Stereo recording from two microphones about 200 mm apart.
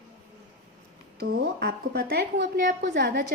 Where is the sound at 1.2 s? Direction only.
50° right (ahead or behind).